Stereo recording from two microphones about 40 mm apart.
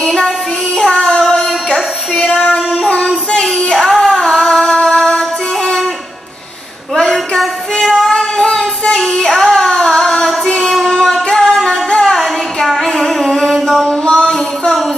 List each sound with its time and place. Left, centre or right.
0.0 s music: centre
0.8 s child singing: left
1.3 s music: left
3.0 s child singing: centre
3.8 s child singing: centre
4.2 s singing: centre
4.8 s music: centre
7.8 s child singing: centre
8.1 s child singing: left
10.2 s music: centre
12.6 s music: centre
13.8 s a sound: centre